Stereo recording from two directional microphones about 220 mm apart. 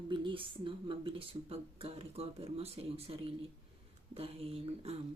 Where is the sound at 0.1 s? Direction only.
20° right (ahead or behind).